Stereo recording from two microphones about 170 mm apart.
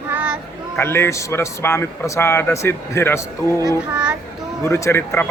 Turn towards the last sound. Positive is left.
turn(degrees=15)  # may be behind; listen again after turning